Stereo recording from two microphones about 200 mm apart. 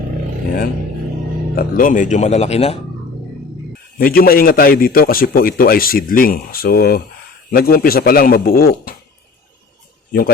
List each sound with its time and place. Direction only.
1.5 s speech: 45° left (ahead or behind)
3.9 s a man's voice: 45° left (ahead or behind)
10.1 s speech: 50° left (ahead or behind)